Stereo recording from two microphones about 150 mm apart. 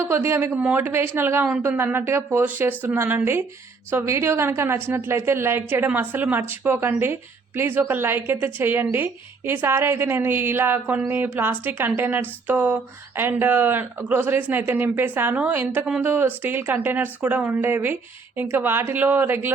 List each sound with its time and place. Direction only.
0.0 s a woman's voice: 15° right (ahead or behind)